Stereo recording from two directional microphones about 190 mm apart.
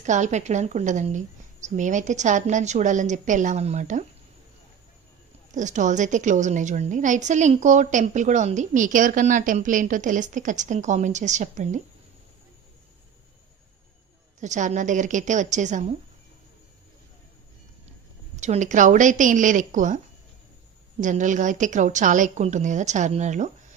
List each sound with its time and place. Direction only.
0.0 s a woman's voice: 40° right (ahead or behind)
5.5 s a woman's voice: 40° right (ahead or behind)
14.4 s a woman's voice: 40° right (ahead or behind)
18.3 s a woman's voice: 40° right (ahead or behind)
21.0 s a woman's voice: 40° right (ahead or behind)